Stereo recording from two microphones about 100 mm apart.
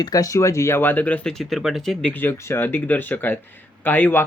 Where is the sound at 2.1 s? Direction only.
20° left (ahead or behind).